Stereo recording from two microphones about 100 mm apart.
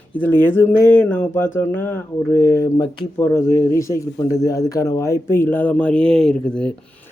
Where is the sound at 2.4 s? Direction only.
30° left (ahead or behind); by 6.7 s 10° left (ahead or behind).